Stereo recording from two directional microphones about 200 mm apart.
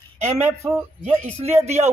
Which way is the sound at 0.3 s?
15° right (ahead or behind).